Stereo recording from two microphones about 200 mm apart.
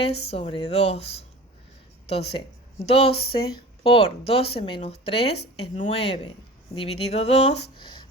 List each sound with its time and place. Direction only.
0.0 s speech: 30° left (ahead or behind)